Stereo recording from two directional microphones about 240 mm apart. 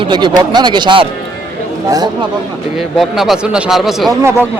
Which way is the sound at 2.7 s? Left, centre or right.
Centre.